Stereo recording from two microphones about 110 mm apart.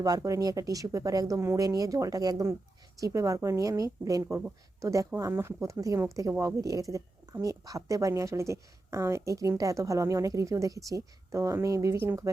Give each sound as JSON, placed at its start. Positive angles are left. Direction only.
{"t": 0.0, "sound": "speech", "side_deg": -30}